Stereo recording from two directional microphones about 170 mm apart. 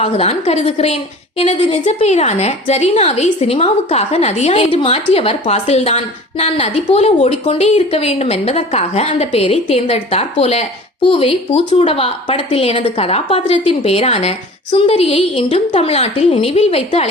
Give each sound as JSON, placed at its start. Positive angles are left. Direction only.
{"t": 0.0, "sound": "a woman's voice", "side_deg": 35}